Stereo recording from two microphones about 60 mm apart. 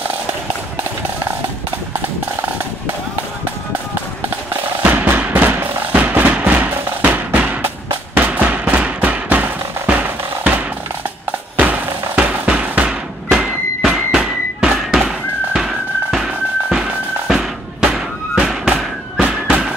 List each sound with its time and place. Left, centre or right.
4.9 s music: right
11.5 s music: right
13.3 s a sound: centre
14.8 s music: centre